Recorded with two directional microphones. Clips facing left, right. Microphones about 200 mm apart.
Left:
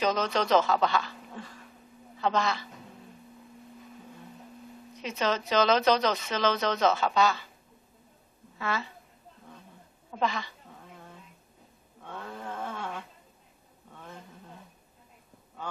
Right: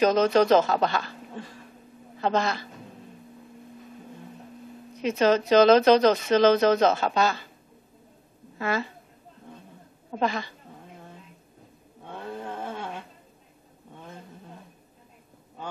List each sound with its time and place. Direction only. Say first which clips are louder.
0.1 s speech: right 6 dB; 45° right (ahead or behind)
2.1 s speech: right 3 dB; 50° right (ahead or behind)
5.0 s speech: right 8 dB; 45° right (ahead or behind)
8.5 s a woman's voice: right 5 dB; 45° right (ahead or behind)
10.1 s speech: right 3 dB; 45° right (ahead or behind)
12.1 s a sound: right 4 dB; 25° right (ahead or behind)
12.6 s a sound: right 2 dB; 30° right (ahead or behind)